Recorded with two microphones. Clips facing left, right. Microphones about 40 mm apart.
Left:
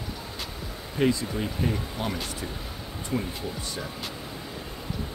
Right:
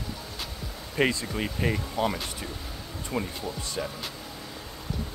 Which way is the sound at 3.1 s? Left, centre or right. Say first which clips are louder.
Left 1 dB; centre.